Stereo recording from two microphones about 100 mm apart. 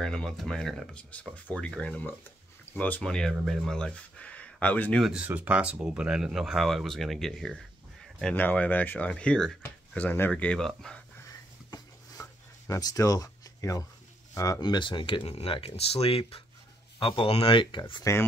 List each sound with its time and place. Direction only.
0.0 s speech: 5° left (ahead or behind)
5.2 s speech: 15° right (ahead or behind); by 7.5 s 5° left (ahead or behind)
8.4 s speech: 15° left (ahead or behind)
9.6 s speech: 20° left (ahead or behind)
11.7 s a sound: 35° left (ahead or behind)
14.3 s speech: 35° left (ahead or behind)
14.6 s speech: 55° left (ahead or behind)